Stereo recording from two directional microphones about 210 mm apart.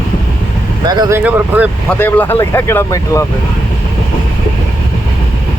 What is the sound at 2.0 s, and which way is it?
Speech, 10° left (ahead or behind).